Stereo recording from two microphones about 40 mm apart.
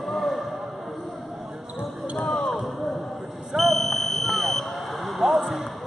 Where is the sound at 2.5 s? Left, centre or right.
Centre.